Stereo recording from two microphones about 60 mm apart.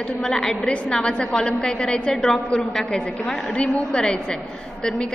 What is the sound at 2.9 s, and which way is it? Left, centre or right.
A woman's voice, centre.